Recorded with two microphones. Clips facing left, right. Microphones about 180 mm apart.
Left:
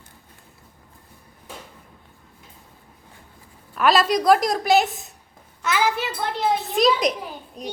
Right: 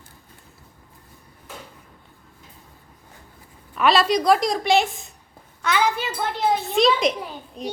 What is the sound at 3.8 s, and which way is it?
A woman's voice, centre (ahead or behind).